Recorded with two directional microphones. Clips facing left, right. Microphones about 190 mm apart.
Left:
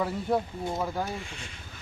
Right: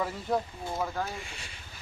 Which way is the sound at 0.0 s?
Centre (ahead or behind).